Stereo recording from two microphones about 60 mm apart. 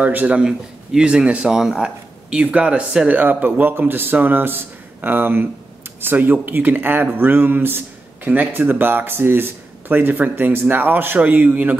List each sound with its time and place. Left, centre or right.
0.0 s speech: right
0.4 s speech: centre
2.3 s speech: right
3.2 s speech: right